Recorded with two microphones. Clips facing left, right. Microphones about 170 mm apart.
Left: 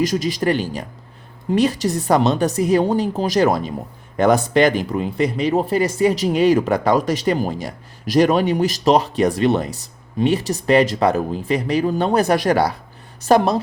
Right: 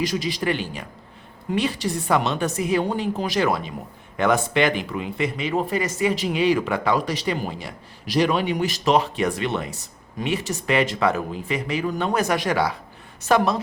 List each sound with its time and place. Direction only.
0.0 s speech: 45° left (ahead or behind)